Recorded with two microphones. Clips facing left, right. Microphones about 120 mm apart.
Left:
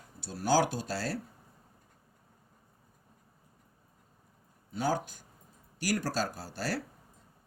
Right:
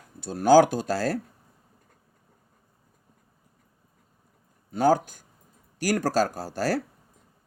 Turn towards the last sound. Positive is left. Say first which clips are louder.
# right 9 dB
turn(degrees=-45)  # may be behind; listen again after turning